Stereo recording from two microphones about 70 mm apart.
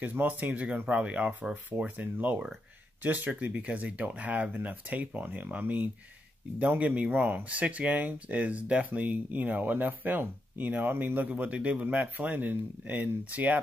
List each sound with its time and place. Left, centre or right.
0.0 s speech: right